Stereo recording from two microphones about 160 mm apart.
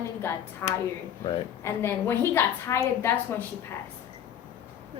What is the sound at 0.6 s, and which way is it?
Speech, 15° left (ahead or behind).